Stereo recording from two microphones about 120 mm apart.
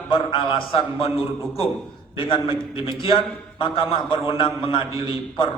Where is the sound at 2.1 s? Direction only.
50° left (ahead or behind).